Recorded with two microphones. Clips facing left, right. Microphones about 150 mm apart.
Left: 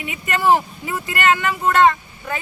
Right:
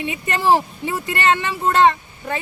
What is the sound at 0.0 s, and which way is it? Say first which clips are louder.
A woman's voice: even; 30° right (ahead or behind).